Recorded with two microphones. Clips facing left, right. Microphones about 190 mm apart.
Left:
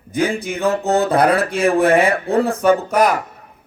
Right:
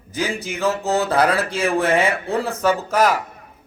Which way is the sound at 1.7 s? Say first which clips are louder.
Left 4 dB; 30° left (ahead or behind).